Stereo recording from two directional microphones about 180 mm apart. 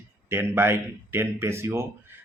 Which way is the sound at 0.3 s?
10° right (ahead or behind).